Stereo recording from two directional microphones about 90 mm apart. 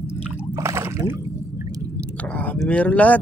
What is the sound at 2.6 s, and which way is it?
Speech, 15° left (ahead or behind).